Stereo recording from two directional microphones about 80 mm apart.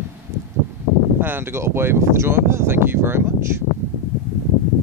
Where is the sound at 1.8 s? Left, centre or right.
Right.